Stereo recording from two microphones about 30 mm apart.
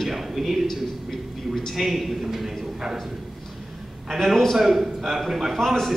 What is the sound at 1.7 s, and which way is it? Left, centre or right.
Speech, centre.